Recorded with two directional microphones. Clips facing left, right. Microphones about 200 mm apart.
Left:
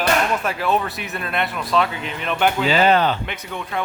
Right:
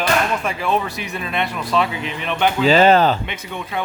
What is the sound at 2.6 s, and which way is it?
Speech, 40° right (ahead or behind).